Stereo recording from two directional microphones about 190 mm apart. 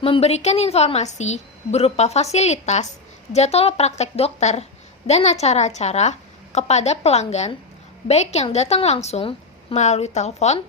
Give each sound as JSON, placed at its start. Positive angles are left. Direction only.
{"t": 0.0, "sound": "a woman's voice", "side_deg": 30}